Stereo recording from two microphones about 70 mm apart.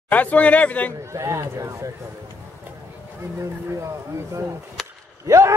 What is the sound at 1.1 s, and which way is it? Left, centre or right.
Speech, right.